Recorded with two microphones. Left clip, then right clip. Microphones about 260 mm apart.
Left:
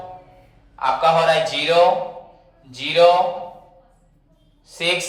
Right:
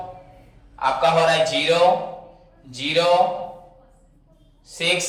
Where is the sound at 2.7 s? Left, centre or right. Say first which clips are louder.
Left 4 dB; centre.